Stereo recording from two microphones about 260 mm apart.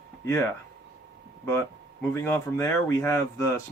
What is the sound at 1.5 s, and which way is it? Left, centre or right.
Speech, centre.